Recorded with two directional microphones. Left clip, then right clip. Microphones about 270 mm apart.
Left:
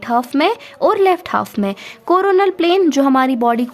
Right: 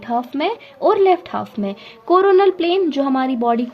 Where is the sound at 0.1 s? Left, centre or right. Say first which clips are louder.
Left 5 dB; left.